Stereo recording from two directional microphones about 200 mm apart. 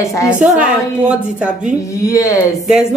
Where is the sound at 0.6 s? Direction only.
5° right (ahead or behind).